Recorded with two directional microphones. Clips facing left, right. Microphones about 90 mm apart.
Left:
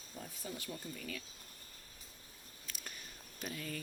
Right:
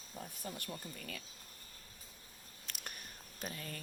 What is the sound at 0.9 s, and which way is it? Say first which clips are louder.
Speech: left 2 dB; 55° right (ahead or behind).